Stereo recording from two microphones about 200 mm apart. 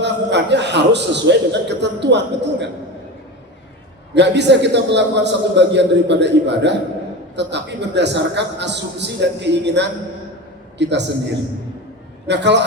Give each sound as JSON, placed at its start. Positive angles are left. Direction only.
{"t": 0.0, "sound": "a man's voice", "side_deg": -60}
{"t": 4.1, "sound": "a man's voice", "side_deg": -60}
{"t": 12.3, "sound": "a man's voice", "side_deg": -60}